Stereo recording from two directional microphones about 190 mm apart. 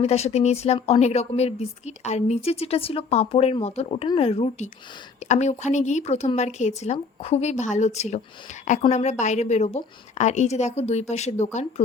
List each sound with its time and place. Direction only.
0.0 s speech: 35° left (ahead or behind)